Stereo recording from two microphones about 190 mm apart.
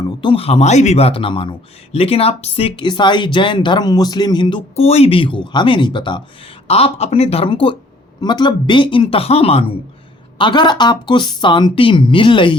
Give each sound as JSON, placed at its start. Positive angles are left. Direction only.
{"t": 0.0, "sound": "speech", "side_deg": 25}